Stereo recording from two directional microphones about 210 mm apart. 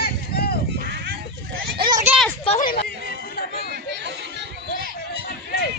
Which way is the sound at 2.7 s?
45° left (ahead or behind).